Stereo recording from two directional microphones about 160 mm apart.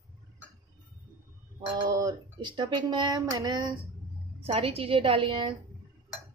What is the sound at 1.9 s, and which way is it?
Speech, 20° right (ahead or behind).